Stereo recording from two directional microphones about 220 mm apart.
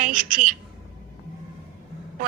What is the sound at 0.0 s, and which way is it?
Speech, 35° right (ahead or behind).